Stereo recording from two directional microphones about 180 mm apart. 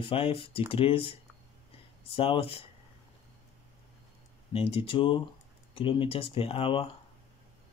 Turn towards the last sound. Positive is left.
turn(degrees=30)  # may be behind; listen again after turning